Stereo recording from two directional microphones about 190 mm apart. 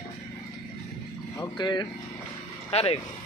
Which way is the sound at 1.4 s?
25° left (ahead or behind).